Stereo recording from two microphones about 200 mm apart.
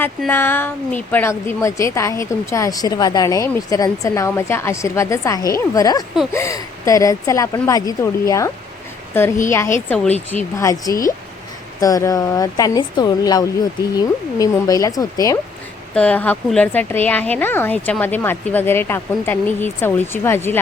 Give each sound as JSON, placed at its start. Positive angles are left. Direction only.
{"t": 0.0, "sound": "a woman's voice", "side_deg": 10}
{"t": 16.0, "sound": "a woman's voice", "side_deg": 5}